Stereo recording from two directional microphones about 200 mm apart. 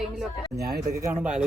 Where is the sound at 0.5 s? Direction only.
50° right (ahead or behind).